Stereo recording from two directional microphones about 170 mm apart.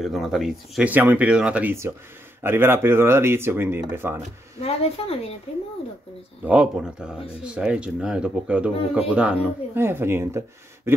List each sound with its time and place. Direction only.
0.0 s speech: centre (ahead or behind)
4.6 s speech: 35° left (ahead or behind)
6.4 s speech: 5° right (ahead or behind)
10.9 s a sound: 15° right (ahead or behind)